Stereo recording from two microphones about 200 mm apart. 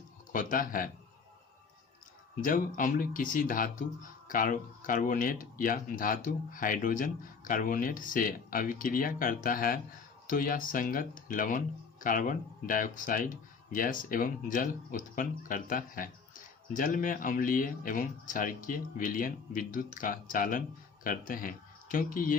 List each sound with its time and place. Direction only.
0.3 s speech: 45° left (ahead or behind)
2.4 s speech: 40° left (ahead or behind)